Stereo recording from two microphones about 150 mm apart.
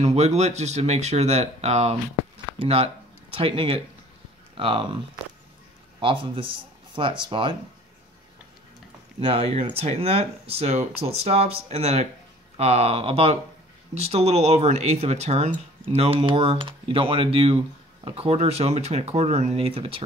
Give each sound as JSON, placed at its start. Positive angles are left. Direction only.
{"t": 0.0, "sound": "speech", "side_deg": -45}
{"t": 5.9, "sound": "speech", "side_deg": -35}
{"t": 9.2, "sound": "speech", "side_deg": -40}